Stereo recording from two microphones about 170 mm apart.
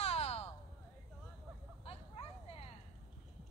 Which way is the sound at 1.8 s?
35° left (ahead or behind).